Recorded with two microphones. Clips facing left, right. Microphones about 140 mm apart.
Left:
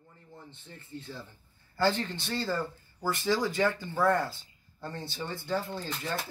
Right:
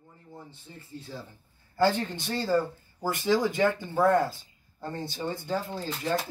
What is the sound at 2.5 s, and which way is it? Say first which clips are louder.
Speech: right 6 dB; 20° right (ahead or behind).